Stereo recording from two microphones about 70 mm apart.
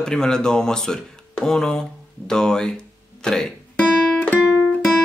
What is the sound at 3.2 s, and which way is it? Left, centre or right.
Music, centre.